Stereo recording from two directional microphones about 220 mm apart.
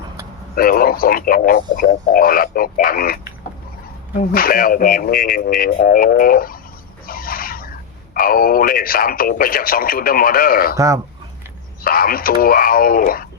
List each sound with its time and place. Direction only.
0.5 s speech: 40° left (ahead or behind)
4.3 s speech: 40° left (ahead or behind)
7.1 s a sound: 40° left (ahead or behind)
8.1 s speech: 40° left (ahead or behind)
10.8 s speech: 15° right (ahead or behind)
11.8 s speech: 40° left (ahead or behind)